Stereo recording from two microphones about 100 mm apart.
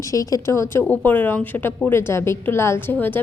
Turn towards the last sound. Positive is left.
turn(degrees=20)  # may be behind; listen again after turning